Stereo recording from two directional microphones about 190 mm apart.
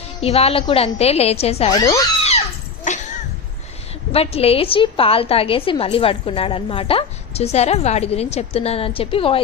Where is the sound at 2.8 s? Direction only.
40° left (ahead or behind).